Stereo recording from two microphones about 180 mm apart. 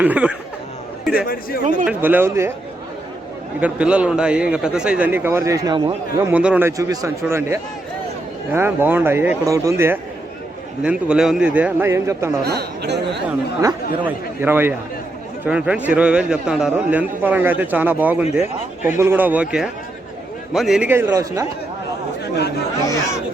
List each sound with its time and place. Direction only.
0.0 s a man's voice: 10° right (ahead or behind)
1.3 s speech: 55° left (ahead or behind)
1.9 s a man's voice: 10° right (ahead or behind)
3.6 s a man's voice: 5° right (ahead or behind); by 6.0 s 25° right (ahead or behind)
6.3 s a man's voice: 5° right (ahead or behind)
12.4 s speech: 65° right (ahead or behind)
13.6 s a man's voice: 15° right (ahead or behind)